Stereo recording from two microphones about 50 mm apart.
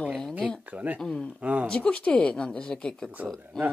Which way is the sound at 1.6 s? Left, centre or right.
Left.